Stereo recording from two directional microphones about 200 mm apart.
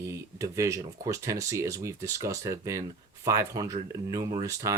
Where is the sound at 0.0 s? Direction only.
15° right (ahead or behind).